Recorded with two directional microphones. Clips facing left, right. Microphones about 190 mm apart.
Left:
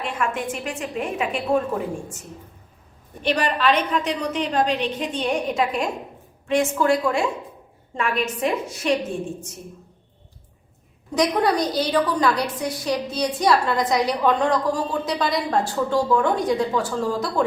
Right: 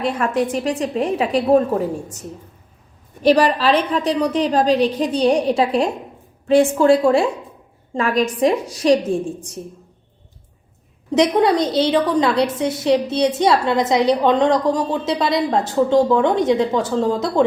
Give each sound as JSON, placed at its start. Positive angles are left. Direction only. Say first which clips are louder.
{"t": 0.0, "sound": "a woman's voice", "louder": "right 7 dB", "side_deg": -35}
{"t": 3.2, "sound": "a woman's voice", "louder": "right 6 dB", "side_deg": -35}
{"t": 11.3, "sound": "a woman's voice", "louder": "right 5 dB", "side_deg": -25}